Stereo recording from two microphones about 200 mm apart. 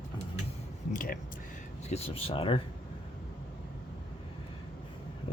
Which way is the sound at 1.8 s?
30° left (ahead or behind).